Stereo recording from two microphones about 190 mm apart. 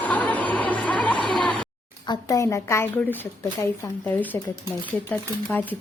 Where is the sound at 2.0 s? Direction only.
15° left (ahead or behind).